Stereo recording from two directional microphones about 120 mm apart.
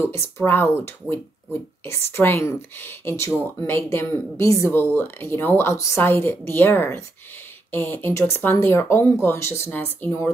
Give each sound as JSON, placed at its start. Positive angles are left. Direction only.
{"t": 0.4, "sound": "speech", "side_deg": 20}